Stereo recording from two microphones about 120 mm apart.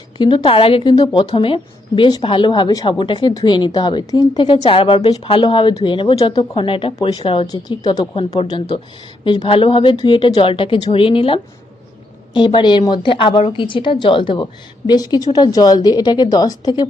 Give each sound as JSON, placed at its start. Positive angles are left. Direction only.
{"t": 0.2, "sound": "a woman's voice", "side_deg": 40}
{"t": 4.6, "sound": "a woman's voice", "side_deg": 50}
{"t": 6.7, "sound": "speech", "side_deg": 50}
{"t": 7.4, "sound": "a woman's voice", "side_deg": 30}
{"t": 7.9, "sound": "speech", "side_deg": 45}
{"t": 14.4, "sound": "a woman's voice", "side_deg": 35}